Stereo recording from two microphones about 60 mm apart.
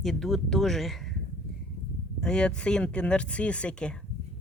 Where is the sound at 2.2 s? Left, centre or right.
Centre.